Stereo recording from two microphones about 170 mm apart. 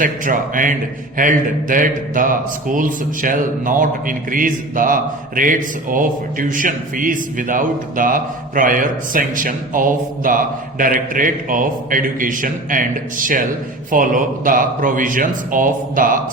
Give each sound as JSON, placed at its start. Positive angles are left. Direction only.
{"t": 0.0, "sound": "a man's voice", "side_deg": -50}